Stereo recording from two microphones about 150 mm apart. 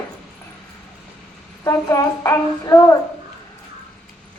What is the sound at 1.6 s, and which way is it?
A woman's voice, 20° left (ahead or behind).